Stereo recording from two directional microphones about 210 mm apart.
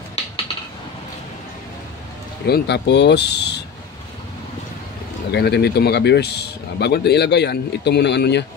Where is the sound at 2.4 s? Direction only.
50° left (ahead or behind).